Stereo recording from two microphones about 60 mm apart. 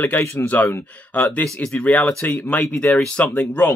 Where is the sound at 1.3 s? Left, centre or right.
Centre.